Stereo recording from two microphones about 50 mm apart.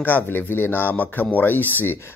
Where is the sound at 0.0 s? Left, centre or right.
Left.